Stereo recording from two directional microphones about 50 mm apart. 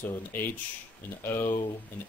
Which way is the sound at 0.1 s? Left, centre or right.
Left.